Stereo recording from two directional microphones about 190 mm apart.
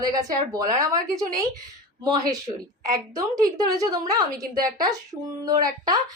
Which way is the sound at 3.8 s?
20° right (ahead or behind).